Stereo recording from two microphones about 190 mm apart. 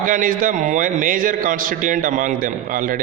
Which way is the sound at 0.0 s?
45° right (ahead or behind).